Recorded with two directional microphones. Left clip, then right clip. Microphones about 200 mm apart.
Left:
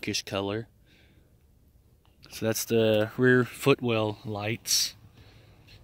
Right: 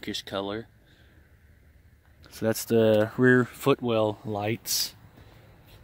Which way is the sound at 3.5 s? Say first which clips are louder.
Even; centre (ahead or behind).